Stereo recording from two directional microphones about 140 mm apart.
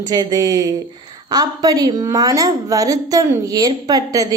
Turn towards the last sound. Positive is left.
turn(degrees=-25)  # may be behind; listen again after turning